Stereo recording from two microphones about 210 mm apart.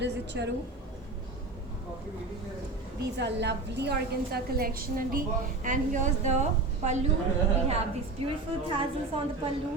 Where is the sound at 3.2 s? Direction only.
55° right (ahead or behind); by 6.4 s 35° right (ahead or behind).